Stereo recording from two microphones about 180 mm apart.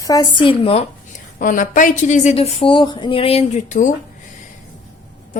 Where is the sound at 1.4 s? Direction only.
45° left (ahead or behind).